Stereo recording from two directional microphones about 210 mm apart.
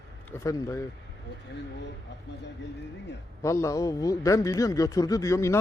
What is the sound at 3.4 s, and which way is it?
A man's voice, 15° left (ahead or behind).